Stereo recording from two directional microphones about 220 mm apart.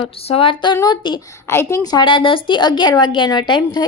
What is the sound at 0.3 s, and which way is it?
A woman's voice, 25° left (ahead or behind).